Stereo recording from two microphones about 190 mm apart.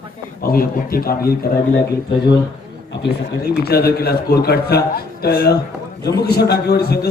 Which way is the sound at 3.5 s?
55° left (ahead or behind).